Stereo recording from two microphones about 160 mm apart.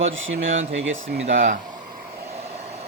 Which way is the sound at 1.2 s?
55° right (ahead or behind).